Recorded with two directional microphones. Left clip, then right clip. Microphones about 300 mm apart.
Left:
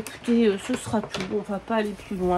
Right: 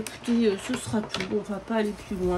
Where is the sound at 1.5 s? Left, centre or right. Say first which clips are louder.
Left 3 dB; centre.